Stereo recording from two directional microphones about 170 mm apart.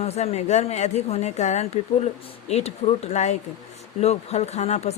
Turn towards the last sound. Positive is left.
turn(degrees=40)  # may be behind; listen again after turning